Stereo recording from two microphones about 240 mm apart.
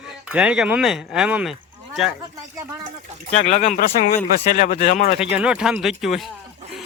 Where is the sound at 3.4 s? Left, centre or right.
Left.